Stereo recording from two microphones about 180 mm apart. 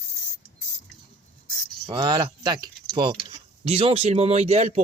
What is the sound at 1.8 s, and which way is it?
Speech, 25° right (ahead or behind).